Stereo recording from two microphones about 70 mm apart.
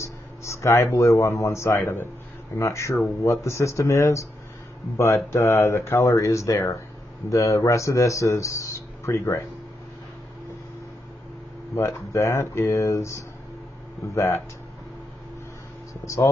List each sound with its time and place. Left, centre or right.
0.0 s a sound: left
0.9 s speech: left
1.8 s a man's voice: left
2.5 s speech: left
11.7 s speech: left
15.9 s speech: left